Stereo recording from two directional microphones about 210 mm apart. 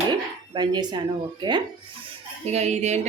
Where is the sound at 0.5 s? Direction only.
20° right (ahead or behind).